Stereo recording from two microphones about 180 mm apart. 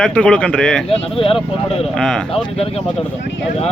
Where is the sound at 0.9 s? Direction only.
30° left (ahead or behind).